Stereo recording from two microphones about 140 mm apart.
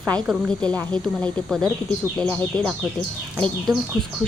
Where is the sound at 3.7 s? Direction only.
30° right (ahead or behind).